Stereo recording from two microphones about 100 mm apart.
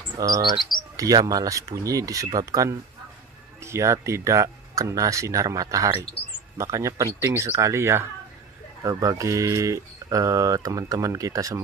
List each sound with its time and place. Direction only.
0.2 s rodents: 45° right (ahead or behind)
0.9 s speech: 35° right (ahead or behind)